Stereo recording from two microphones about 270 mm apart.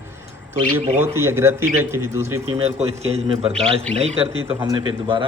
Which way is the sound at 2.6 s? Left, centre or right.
Right.